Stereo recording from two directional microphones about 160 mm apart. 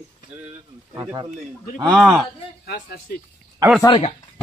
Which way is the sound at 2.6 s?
75° left (ahead or behind).